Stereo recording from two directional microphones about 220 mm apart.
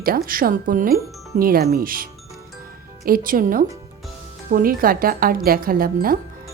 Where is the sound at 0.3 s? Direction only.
40° right (ahead or behind).